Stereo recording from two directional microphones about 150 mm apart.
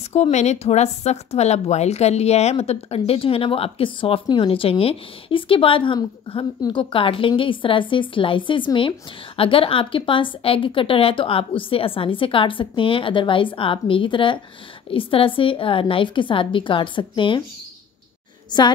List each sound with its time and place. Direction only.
0.1 s speech: 45° left (ahead or behind)